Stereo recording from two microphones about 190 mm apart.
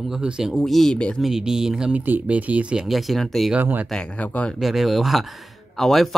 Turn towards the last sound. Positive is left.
turn(degrees=0)  # may be behind; listen again after turning